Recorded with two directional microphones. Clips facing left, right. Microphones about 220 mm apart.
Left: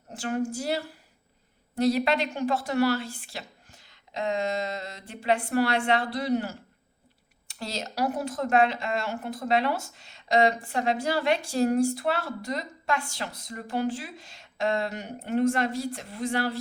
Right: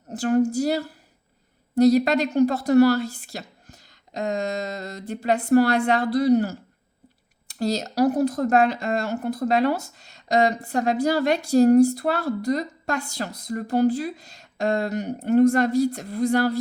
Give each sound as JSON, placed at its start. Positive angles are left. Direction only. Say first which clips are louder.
{"t": 0.1, "sound": "speech", "louder": "right 9 dB", "side_deg": -40}